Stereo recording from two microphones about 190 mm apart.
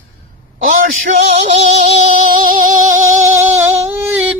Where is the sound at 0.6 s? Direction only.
45° right (ahead or behind).